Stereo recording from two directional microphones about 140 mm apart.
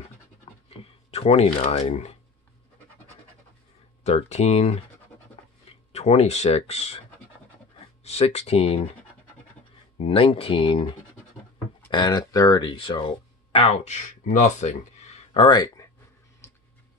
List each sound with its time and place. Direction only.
0.7 s speech: 45° left (ahead or behind)
4.0 s speech: 50° left (ahead or behind)
8.0 s speech: 50° left (ahead or behind)
9.9 s speech: 40° left (ahead or behind)
11.9 s speech: 30° left (ahead or behind); by 15.4 s 55° left (ahead or behind)
15.4 s speech: 30° left (ahead or behind)
16.4 s a sound: 20° left (ahead or behind)